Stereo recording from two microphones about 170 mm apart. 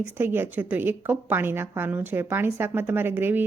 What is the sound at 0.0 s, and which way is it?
Speech, 10° right (ahead or behind).